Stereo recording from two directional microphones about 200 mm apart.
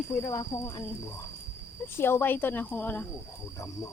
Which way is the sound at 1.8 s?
10° left (ahead or behind).